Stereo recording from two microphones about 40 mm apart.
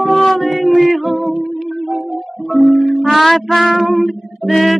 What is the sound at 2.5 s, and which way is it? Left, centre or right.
Music, centre.